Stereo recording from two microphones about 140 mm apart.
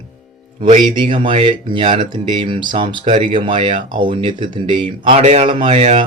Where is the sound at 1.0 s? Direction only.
35° right (ahead or behind).